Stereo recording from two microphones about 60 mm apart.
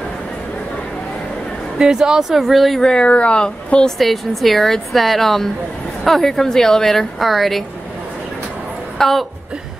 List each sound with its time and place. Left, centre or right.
1.8 s a woman's voice: centre
2.8 s a woman's voice: centre
4.0 s a woman's voice: centre
8.9 s a woman's voice: centre